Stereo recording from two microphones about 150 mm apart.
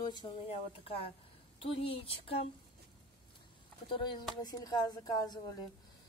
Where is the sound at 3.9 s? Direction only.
30° left (ahead or behind).